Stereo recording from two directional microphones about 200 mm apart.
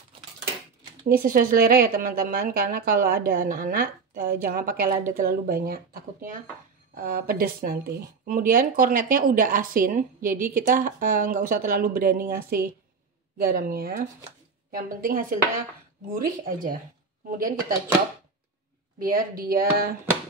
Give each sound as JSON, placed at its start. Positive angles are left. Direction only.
{"t": 1.0, "sound": "a woman's voice", "side_deg": -45}
{"t": 7.0, "sound": "a woman's voice", "side_deg": -45}
{"t": 18.9, "sound": "a woman's voice", "side_deg": -45}